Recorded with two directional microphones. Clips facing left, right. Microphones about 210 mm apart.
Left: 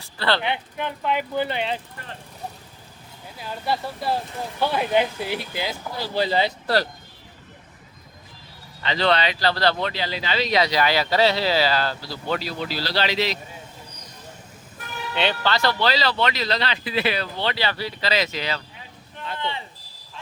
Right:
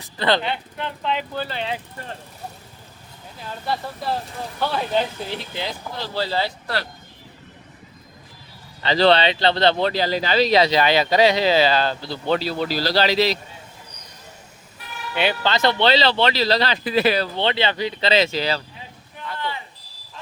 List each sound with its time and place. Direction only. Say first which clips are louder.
0.0 s speech: right 3 dB; 20° right (ahead or behind)
0.4 s speech: left 1 dB; 15° left (ahead or behind)
4.6 s speech: left 1 dB; 10° left (ahead or behind)
6.1 s speech: left 2 dB; 15° left (ahead or behind)
8.8 s speech: right 5 dB; 35° right (ahead or behind)
9.8 s speech: right 6 dB; 40° right (ahead or behind)
15.1 s speech: right 2 dB; 5° right (ahead or behind)
15.4 s speech: right 6 dB; 20° right (ahead or behind); by 17.2 s 40° right (ahead or behind)
17.3 s speech: right 4 dB; 25° right (ahead or behind)
19.2 s a sound: even; 25° left (ahead or behind)